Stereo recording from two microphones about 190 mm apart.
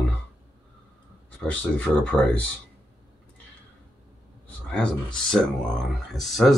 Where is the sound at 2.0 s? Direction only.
5° left (ahead or behind).